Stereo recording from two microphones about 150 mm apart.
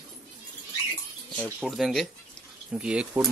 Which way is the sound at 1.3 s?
10° left (ahead or behind).